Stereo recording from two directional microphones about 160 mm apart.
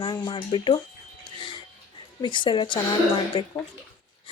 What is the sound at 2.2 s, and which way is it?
A woman's voice, 30° left (ahead or behind).